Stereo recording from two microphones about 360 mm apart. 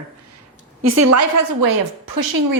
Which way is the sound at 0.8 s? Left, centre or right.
Right.